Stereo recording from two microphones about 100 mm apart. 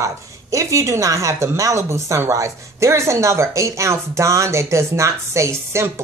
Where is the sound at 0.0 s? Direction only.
30° right (ahead or behind).